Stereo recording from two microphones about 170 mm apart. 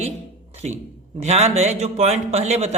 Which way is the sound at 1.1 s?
40° right (ahead or behind).